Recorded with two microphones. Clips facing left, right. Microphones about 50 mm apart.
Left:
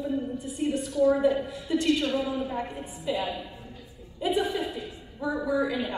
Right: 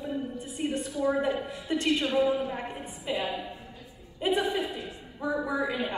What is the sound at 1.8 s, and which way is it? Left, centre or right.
A woman's voice, centre.